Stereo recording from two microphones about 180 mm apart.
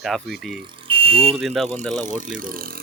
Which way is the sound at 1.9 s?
45° right (ahead or behind).